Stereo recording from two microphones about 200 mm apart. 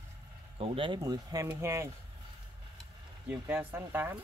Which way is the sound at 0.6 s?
25° right (ahead or behind).